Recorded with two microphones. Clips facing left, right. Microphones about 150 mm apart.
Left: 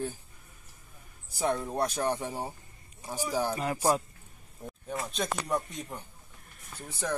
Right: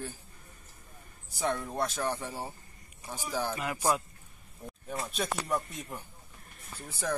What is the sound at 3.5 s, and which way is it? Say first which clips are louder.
Music: left 1 dB; 35° left (ahead or behind).